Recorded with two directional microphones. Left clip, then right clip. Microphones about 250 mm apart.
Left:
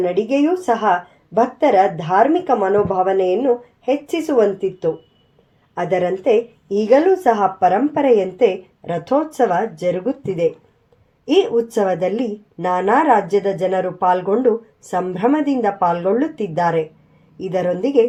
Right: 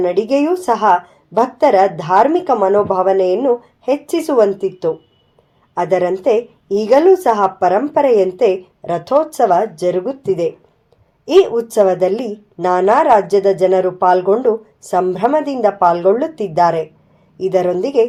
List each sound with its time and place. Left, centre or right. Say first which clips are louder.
0.0 s a woman's voice: right 3 dB; right